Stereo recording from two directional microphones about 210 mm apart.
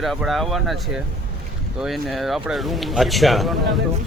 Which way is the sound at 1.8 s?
Centre (ahead or behind).